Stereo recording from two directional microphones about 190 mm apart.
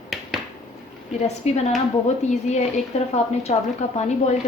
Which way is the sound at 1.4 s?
35° left (ahead or behind).